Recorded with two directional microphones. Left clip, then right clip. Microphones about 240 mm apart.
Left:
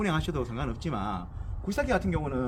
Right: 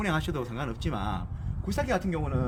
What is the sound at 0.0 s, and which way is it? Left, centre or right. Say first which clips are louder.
A man's voice: even; centre.